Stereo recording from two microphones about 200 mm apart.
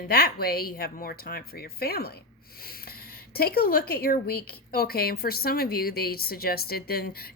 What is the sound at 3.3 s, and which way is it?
Speech, 50° left (ahead or behind).